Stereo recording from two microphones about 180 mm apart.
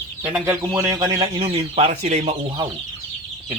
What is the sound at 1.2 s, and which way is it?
Speech, 30° right (ahead or behind).